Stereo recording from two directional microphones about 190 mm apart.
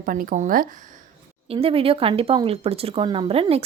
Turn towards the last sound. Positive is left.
turn(degrees=-30)  # may be behind; listen again after turning